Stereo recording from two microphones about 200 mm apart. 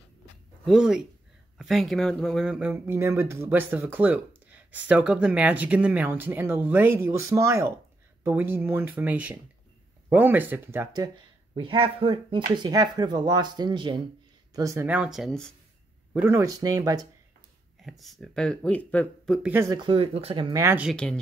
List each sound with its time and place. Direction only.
0.7 s speech: centre (ahead or behind)
11.5 s speech: 25° right (ahead or behind); by 15.5 s centre (ahead or behind)
16.1 s speech: 15° right (ahead or behind)
17.8 s speech: centre (ahead or behind)
19.5 s speech: 15° right (ahead or behind)
20.6 s speech: 5° right (ahead or behind)
20.9 s speech: 5° left (ahead or behind)